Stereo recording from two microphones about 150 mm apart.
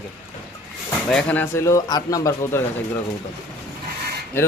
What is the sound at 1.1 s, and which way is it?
Speech, 5° left (ahead or behind).